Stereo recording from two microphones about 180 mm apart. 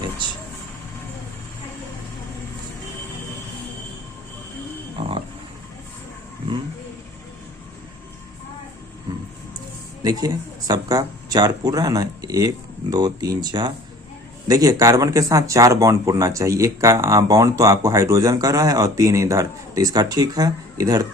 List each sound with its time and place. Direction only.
4.9 s livestock: 30° right (ahead or behind)
10.0 s speech: 20° right (ahead or behind)